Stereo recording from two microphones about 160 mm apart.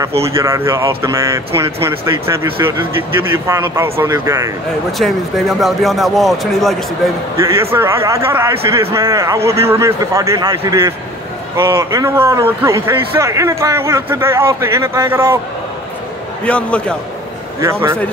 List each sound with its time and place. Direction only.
0.3 s a man's voice: 15° right (ahead or behind)
4.9 s speech: centre (ahead or behind)
7.3 s a man's voice: 15° right (ahead or behind)
16.4 s a man's voice: 5° left (ahead or behind)
17.6 s a man's voice: 15° right (ahead or behind)